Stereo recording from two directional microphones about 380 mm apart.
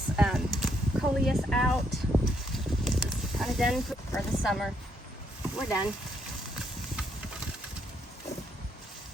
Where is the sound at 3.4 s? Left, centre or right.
Centre.